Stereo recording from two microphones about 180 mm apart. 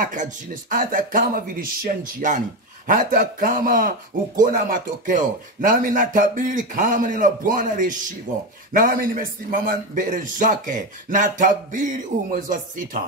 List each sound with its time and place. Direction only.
0.0 s a man's voice: 45° right (ahead or behind)